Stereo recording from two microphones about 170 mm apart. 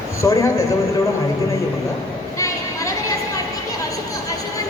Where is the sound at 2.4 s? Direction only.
20° left (ahead or behind).